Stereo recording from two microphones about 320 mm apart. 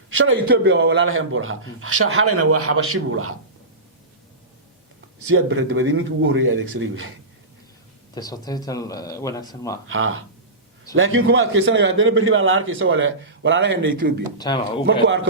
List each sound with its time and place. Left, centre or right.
0.1 s a man's voice: right
5.3 s a man's voice: right
8.1 s speech: centre
9.9 s a man's voice: right
14.3 s speech: centre
15.0 s a man's voice: right